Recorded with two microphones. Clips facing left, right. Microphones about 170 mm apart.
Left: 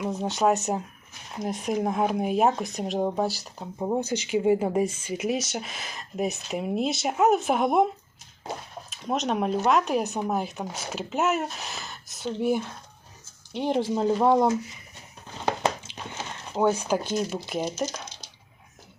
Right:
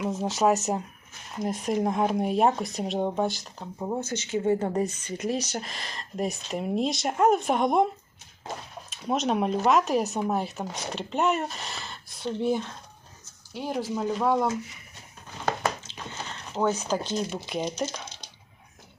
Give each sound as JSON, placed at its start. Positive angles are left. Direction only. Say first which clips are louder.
{"t": 0.0, "sound": "speech", "louder": "even", "side_deg": 0}
{"t": 3.6, "sound": "speech", "louder": "left 4 dB", "side_deg": 15}
{"t": 8.9, "sound": "speech", "louder": "right 1 dB", "side_deg": 0}
{"t": 13.5, "sound": "speech", "louder": "left 5 dB", "side_deg": 25}
{"t": 15.4, "sound": "a sound", "louder": "left 2 dB", "side_deg": 15}